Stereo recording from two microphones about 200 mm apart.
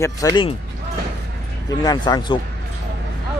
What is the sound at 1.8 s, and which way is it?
Speech, 20° left (ahead or behind).